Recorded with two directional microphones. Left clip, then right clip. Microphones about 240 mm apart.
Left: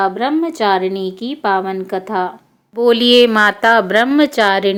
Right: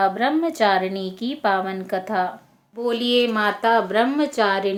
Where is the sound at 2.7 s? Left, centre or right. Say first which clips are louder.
Left 10 dB; left.